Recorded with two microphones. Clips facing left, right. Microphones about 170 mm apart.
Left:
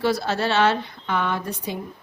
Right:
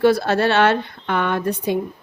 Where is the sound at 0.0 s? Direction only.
55° right (ahead or behind).